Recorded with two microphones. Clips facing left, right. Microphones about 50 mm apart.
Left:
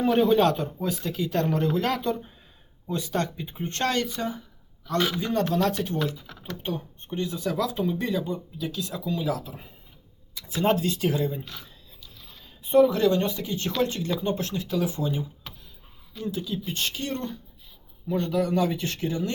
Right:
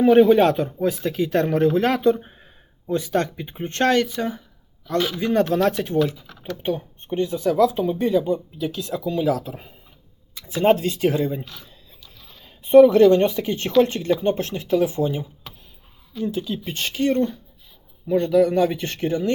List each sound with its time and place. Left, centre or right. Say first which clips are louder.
0.0 s speech: right 7 dB; right
8.6 s speech: right 1 dB; right
10.3 s speech: right 6 dB; right
12.7 s speech: right 8 dB; right
18.1 s speech: right 7 dB; right